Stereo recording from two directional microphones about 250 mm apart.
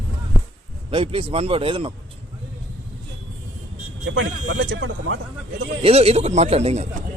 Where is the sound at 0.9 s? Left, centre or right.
Right.